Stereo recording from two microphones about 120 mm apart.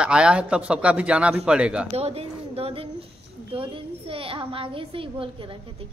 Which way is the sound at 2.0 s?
55° right (ahead or behind).